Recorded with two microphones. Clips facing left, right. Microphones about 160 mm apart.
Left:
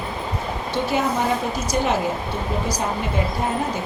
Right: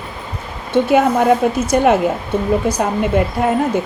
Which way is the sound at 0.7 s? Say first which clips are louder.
Right 9 dB; 60° right (ahead or behind).